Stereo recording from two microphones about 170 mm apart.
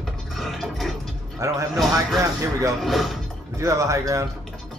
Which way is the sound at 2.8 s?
Centre (ahead or behind).